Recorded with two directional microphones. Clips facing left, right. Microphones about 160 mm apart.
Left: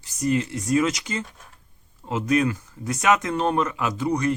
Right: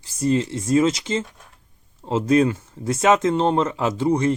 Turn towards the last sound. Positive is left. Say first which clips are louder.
# right 4 dB
turn(degrees=-25)  # may be behind; listen again after turning